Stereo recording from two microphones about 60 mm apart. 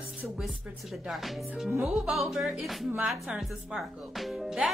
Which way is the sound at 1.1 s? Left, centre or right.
Centre.